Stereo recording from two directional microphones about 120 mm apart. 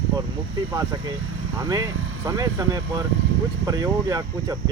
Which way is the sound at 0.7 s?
35° right (ahead or behind).